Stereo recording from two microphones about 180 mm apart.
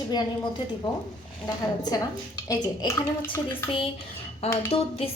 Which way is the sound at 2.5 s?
15° left (ahead or behind).